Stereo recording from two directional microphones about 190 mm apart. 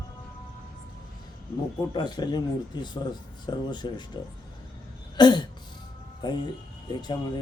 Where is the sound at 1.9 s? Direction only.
20° left (ahead or behind).